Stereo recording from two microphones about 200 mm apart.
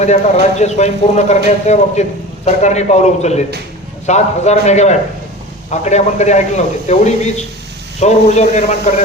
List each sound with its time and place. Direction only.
0.0 s a man's voice: 35° left (ahead or behind)